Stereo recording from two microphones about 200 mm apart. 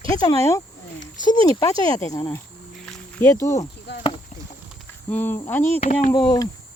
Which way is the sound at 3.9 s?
60° left (ahead or behind).